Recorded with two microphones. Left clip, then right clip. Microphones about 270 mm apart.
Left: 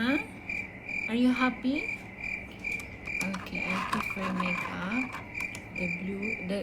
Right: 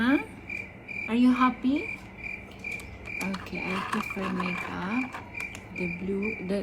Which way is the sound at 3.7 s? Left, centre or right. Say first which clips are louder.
Even; centre.